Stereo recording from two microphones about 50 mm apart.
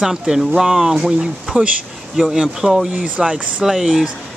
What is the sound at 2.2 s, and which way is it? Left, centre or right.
Speech, centre.